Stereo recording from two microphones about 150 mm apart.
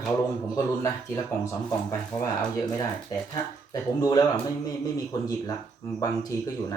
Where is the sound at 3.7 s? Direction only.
25° left (ahead or behind).